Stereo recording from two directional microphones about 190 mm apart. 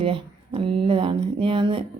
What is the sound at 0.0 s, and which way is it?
A woman's voice, 25° right (ahead or behind).